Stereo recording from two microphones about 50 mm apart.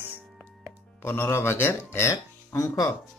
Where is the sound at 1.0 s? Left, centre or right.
Left.